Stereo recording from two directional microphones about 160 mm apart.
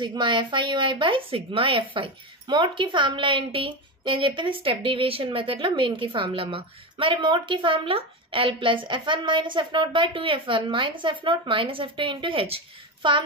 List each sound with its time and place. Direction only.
0.0 s speech: 30° right (ahead or behind)